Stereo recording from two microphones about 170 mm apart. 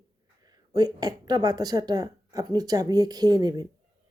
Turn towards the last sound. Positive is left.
turn(degrees=-25)  # may be behind; listen again after turning